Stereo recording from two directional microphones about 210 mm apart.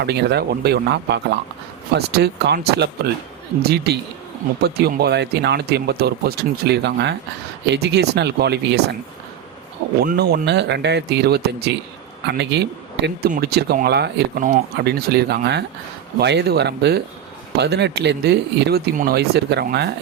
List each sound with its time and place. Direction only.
0.0 s speech: 50° right (ahead or behind)
10.0 s speech: 50° right (ahead or behind)